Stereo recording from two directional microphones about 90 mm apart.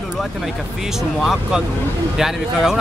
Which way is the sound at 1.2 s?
5° right (ahead or behind).